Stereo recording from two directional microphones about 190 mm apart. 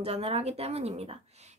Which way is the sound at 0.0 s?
30° right (ahead or behind).